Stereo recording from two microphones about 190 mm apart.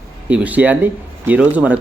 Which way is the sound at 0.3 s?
5° right (ahead or behind).